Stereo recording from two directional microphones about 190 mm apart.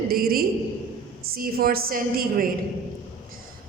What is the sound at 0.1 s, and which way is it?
A woman's voice, 50° right (ahead or behind).